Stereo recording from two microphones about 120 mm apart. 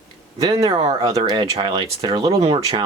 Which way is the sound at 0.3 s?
30° right (ahead or behind).